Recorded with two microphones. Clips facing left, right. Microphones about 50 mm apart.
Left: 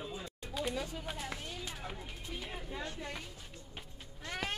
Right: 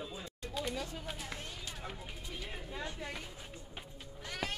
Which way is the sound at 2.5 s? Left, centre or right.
Centre.